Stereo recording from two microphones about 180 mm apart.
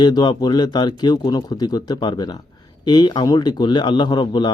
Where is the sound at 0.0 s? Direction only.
25° left (ahead or behind).